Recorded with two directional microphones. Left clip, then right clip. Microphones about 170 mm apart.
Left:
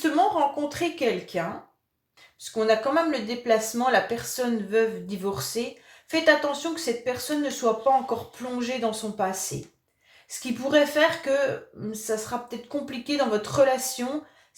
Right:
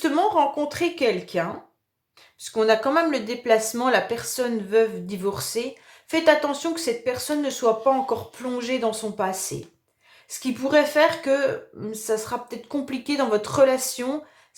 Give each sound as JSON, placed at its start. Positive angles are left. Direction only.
{"t": 0.0, "sound": "speech", "side_deg": -35}